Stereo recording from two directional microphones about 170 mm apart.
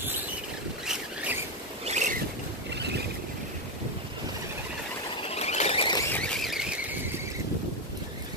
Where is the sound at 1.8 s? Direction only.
45° right (ahead or behind).